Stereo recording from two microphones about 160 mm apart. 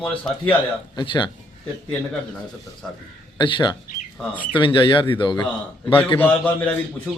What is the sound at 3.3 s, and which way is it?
Speech, 30° left (ahead or behind).